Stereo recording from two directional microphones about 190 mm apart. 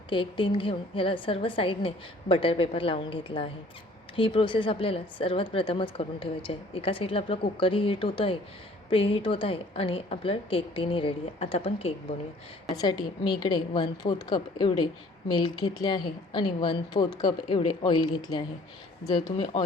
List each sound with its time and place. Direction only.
0.1 s speech: 25° left (ahead or behind)
12.7 s speech: 20° left (ahead or behind)